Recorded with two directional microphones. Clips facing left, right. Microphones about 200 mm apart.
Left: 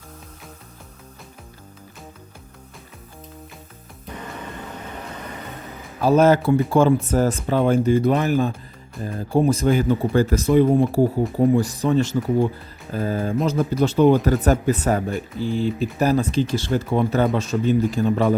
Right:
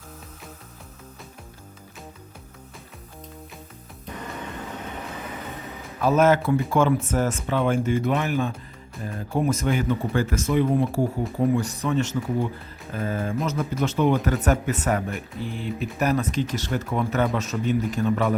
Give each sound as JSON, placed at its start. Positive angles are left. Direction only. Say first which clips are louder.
{"t": 5.0, "sound": "vehicle", "louder": "even", "side_deg": 0}
{"t": 6.0, "sound": "speech", "louder": "left 3 dB", "side_deg": 35}